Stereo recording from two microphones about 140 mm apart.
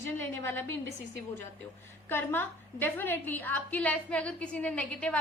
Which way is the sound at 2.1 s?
15° left (ahead or behind).